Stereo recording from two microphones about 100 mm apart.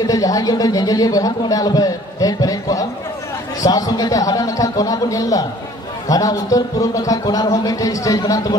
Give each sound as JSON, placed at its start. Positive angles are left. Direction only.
{"t": 0.0, "sound": "a man's voice", "side_deg": 35}